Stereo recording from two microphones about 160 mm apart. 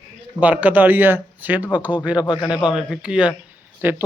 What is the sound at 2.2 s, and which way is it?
Speech, 25° left (ahead or behind).